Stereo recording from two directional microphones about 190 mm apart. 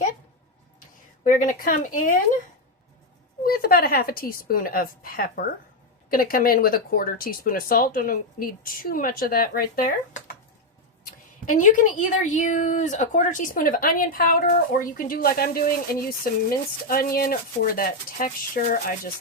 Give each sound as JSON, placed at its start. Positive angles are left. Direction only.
{"t": 1.2, "sound": "a woman's voice", "side_deg": 45}
{"t": 3.4, "sound": "a woman's voice", "side_deg": 50}
{"t": 11.0, "sound": "a woman's voice", "side_deg": 45}